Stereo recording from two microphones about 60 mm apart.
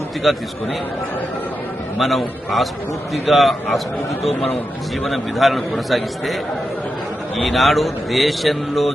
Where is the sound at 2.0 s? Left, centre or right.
Centre.